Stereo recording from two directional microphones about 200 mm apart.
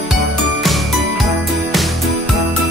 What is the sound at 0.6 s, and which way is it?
Jingle, centre (ahead or behind).